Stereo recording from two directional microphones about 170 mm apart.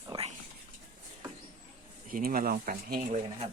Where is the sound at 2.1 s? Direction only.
60° right (ahead or behind).